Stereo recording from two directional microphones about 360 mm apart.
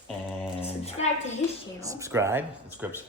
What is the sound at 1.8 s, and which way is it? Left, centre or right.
Speech, centre.